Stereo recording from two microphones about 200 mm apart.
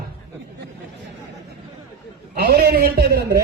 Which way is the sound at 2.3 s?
50° right (ahead or behind).